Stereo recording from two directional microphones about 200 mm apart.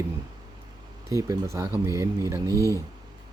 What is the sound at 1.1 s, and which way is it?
Speech, 15° right (ahead or behind).